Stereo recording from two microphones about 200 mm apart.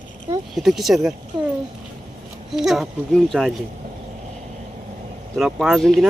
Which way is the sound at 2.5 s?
Centre (ahead or behind).